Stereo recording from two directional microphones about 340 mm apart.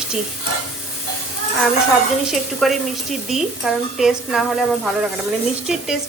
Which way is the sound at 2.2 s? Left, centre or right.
Centre.